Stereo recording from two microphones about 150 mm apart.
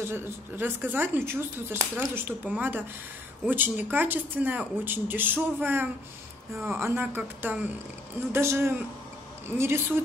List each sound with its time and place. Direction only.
0.1 s speech: 15° right (ahead or behind)